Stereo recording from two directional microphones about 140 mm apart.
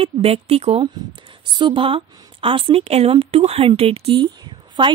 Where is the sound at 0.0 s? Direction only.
45° right (ahead or behind).